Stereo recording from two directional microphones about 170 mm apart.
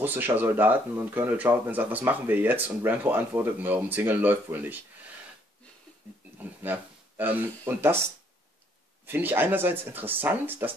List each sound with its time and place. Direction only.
0.0 s speech: 10° right (ahead or behind)
6.4 s speech: 10° right (ahead or behind)
9.0 s speech: 10° right (ahead or behind)